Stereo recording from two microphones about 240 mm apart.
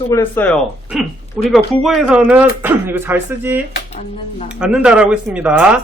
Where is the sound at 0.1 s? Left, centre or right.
Centre.